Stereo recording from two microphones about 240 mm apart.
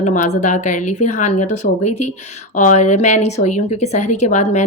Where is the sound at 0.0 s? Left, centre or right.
Left.